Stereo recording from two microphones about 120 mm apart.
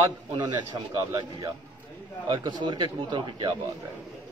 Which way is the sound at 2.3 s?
35° right (ahead or behind).